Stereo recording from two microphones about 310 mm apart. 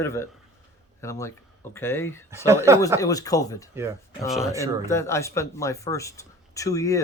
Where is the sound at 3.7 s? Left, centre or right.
Centre.